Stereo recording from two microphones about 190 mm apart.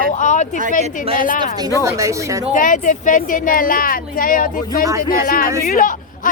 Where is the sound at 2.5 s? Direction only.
45° left (ahead or behind).